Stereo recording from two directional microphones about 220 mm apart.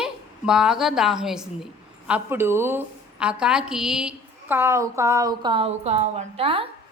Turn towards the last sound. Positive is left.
turn(degrees=-25)  # may be behind; listen again after turning